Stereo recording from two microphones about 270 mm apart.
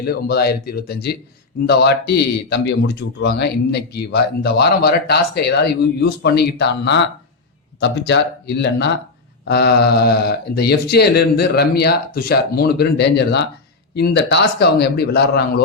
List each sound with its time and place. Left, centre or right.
0.0 s speech: left